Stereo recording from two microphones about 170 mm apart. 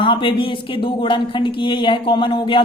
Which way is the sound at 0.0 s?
30° left (ahead or behind).